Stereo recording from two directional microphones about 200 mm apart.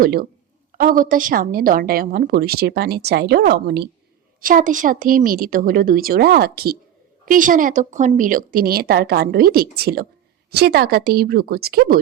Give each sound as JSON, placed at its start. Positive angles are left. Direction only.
{"t": 0.0, "sound": "a woman's voice", "side_deg": -50}
{"t": 4.4, "sound": "a woman's voice", "side_deg": -45}